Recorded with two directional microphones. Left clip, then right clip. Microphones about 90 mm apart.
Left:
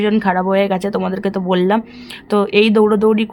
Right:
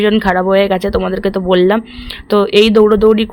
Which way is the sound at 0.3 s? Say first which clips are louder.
Right 3 dB; 15° right (ahead or behind).